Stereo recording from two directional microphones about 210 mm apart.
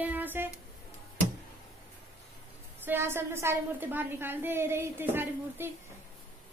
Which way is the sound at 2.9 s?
10° right (ahead or behind).